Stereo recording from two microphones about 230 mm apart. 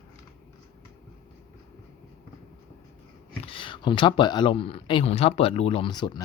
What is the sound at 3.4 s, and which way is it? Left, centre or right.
Speech, left.